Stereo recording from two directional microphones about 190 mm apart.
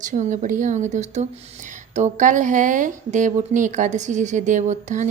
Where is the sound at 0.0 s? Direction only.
40° right (ahead or behind).